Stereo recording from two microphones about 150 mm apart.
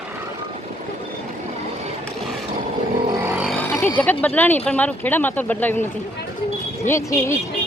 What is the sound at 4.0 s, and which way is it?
Speech, 10° left (ahead or behind).